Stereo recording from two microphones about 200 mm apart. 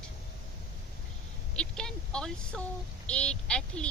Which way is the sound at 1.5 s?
5° left (ahead or behind).